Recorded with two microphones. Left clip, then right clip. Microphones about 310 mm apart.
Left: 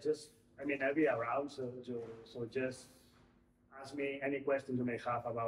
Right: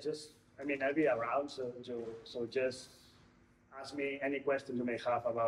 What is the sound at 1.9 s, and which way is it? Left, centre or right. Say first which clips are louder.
Speech: right 2 dB; centre.